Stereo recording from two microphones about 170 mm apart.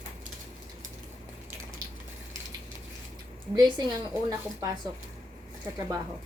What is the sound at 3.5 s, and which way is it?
A woman's voice, 25° right (ahead or behind).